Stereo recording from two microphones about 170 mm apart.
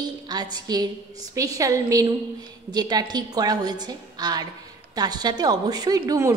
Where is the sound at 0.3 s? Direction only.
25° right (ahead or behind).